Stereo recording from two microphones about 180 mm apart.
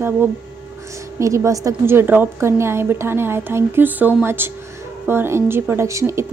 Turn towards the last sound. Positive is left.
turn(degrees=-15)  # may be behind; listen again after turning